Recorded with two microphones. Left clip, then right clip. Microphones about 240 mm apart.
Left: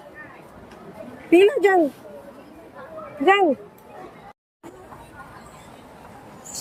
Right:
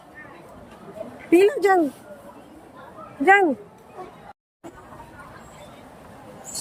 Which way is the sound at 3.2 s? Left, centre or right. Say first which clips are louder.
Right 1 dB; centre.